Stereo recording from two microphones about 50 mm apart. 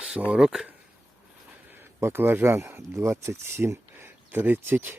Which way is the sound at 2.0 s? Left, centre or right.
Right.